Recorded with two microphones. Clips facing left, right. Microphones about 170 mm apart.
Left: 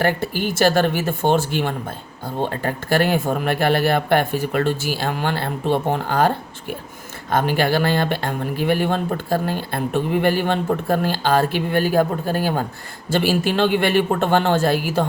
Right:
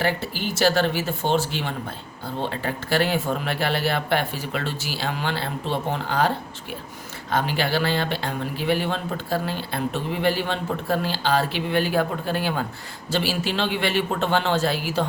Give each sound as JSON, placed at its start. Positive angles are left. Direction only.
{"t": 0.0, "sound": "speech", "side_deg": 50}